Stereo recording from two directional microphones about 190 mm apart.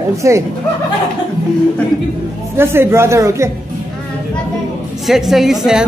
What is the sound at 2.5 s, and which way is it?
Speech, 10° right (ahead or behind).